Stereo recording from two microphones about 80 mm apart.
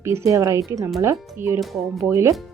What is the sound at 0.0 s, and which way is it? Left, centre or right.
Speech, right.